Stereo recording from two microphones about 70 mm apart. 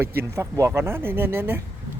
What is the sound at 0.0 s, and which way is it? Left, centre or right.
Speech, right.